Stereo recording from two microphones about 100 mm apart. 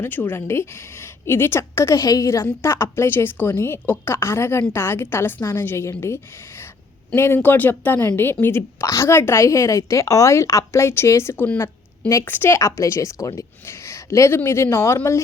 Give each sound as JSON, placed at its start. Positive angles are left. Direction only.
{"t": 0.0, "sound": "a woman's voice", "side_deg": 20}
{"t": 7.2, "sound": "a woman's voice", "side_deg": 25}